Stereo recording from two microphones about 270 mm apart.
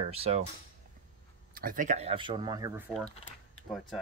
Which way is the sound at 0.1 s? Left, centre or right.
Right.